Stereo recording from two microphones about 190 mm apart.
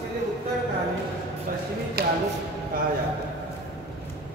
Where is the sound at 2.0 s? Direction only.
55° right (ahead or behind).